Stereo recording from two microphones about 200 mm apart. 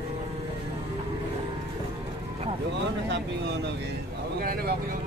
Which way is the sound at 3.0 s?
60° right (ahead or behind).